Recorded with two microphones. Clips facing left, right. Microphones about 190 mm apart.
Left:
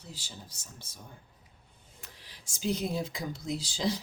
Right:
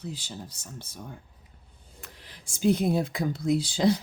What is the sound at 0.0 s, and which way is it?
Speech, 60° right (ahead or behind).